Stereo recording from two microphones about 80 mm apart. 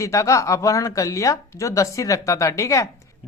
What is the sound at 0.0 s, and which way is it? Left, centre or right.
Speech, left.